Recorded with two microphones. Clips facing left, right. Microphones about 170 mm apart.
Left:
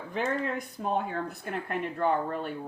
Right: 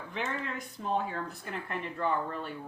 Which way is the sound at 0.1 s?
45° left (ahead or behind).